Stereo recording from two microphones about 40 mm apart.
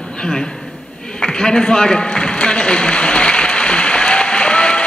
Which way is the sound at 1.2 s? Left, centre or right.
Centre.